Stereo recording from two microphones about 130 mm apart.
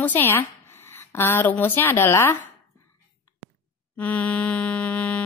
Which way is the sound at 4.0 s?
10° left (ahead or behind).